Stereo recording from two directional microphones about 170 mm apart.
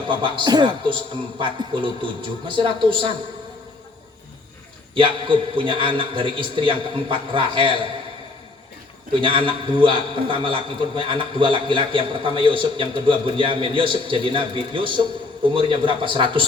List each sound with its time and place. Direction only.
0.0 s a man's voice: 30° right (ahead or behind)
4.9 s a man's voice: 30° right (ahead or behind)
9.2 s a man's voice: 30° right (ahead or behind)